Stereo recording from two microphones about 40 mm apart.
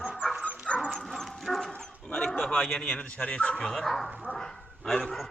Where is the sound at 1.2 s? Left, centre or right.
Centre.